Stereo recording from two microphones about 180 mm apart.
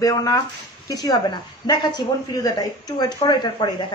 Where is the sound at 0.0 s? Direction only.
20° left (ahead or behind).